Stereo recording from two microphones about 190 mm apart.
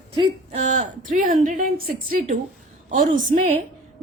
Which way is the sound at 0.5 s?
40° right (ahead or behind).